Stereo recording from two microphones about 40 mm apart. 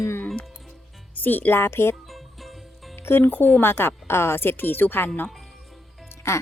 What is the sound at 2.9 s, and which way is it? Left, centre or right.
A woman's voice, left.